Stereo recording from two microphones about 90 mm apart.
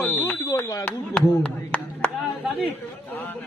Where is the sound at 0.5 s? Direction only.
35° left (ahead or behind).